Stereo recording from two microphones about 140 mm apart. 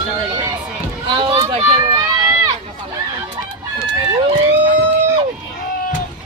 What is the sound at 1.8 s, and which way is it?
Run, 25° right (ahead or behind).